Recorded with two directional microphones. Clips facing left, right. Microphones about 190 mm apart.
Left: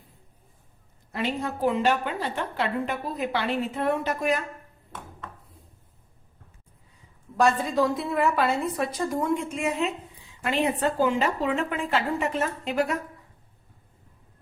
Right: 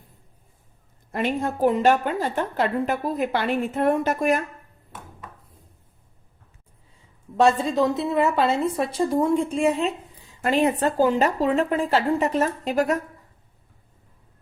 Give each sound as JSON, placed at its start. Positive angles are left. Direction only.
{"t": 1.1, "sound": "a woman's voice", "side_deg": -50}
{"t": 7.3, "sound": "a woman's voice", "side_deg": -25}